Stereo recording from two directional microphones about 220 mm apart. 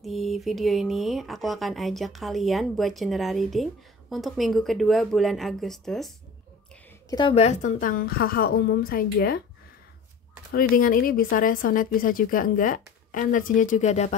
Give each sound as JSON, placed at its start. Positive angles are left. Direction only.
{"t": 0.0, "sound": "speech", "side_deg": 0}
{"t": 7.1, "sound": "a woman's voice", "side_deg": 20}
{"t": 10.5, "sound": "a woman's voice", "side_deg": 40}